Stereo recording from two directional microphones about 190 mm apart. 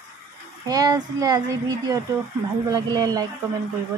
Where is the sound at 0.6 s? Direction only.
20° right (ahead or behind).